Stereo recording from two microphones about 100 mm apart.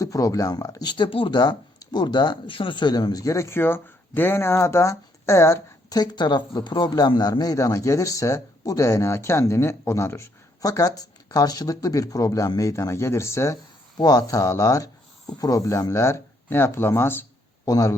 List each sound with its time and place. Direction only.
0.0 s speech: 35° left (ahead or behind)
0.9 s speech: 55° left (ahead or behind)
1.4 s speech: 45° left (ahead or behind); by 5.6 s 25° left (ahead or behind)
5.9 s speech: 45° left (ahead or behind); by 13.6 s 30° left (ahead or behind)
13.9 s speech: 40° left (ahead or behind); by 17.2 s 25° left (ahead or behind)
17.7 s speech: 35° left (ahead or behind)